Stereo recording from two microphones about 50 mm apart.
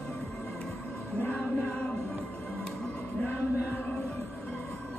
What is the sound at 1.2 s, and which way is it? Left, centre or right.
Music, left.